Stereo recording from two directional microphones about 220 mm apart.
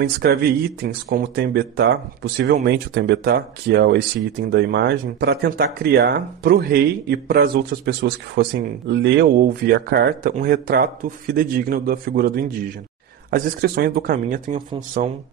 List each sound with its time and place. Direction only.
0.0 s speech: 45° right (ahead or behind)